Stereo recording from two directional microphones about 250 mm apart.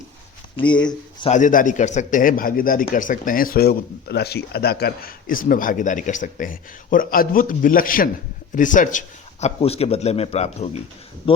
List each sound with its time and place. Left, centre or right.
0.9 s a man's voice: left